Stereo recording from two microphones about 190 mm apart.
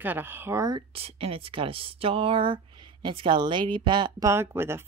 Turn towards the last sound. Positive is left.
turn(degrees=-10)  # may be behind; listen again after turning